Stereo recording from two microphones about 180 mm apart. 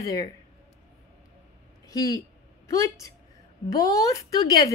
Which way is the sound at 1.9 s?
20° left (ahead or behind).